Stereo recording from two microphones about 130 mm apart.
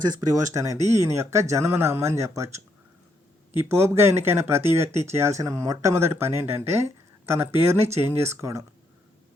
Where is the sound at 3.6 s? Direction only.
20° right (ahead or behind).